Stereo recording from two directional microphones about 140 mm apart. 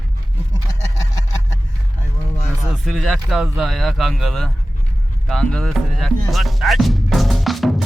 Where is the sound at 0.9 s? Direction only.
25° left (ahead or behind).